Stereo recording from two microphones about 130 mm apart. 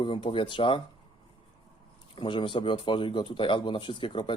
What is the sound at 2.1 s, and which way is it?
A man's voice, 40° left (ahead or behind).